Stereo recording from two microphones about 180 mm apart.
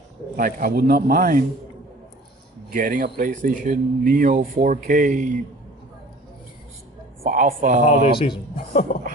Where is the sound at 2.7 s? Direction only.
50° right (ahead or behind).